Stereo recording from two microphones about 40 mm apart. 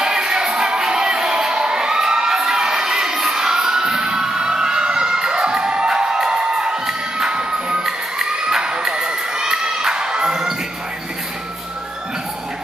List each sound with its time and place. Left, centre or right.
0.0 s music: centre
7.8 s children shouting: centre